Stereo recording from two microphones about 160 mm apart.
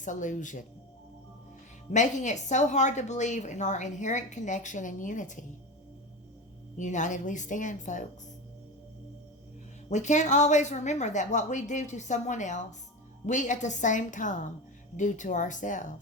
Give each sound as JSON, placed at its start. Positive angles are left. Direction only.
{"t": 0.0, "sound": "a woman's voice", "side_deg": 50}
{"t": 1.9, "sound": "a woman's voice", "side_deg": 50}
{"t": 6.7, "sound": "a woman's voice", "side_deg": 50}
{"t": 9.9, "sound": "a woman's voice", "side_deg": 50}